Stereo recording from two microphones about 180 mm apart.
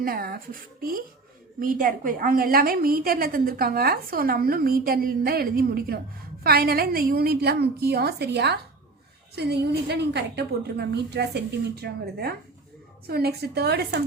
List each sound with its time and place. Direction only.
0.0 s a woman's voice: 55° right (ahead or behind)